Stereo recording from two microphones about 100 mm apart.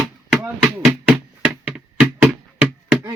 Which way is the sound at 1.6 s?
10° right (ahead or behind).